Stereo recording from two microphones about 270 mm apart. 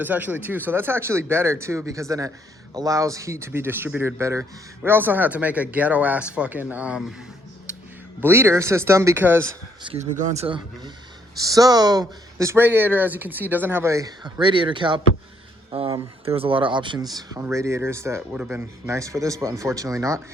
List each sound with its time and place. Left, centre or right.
0.0 s speech: centre
8.2 s speech: centre
9.9 s speech: right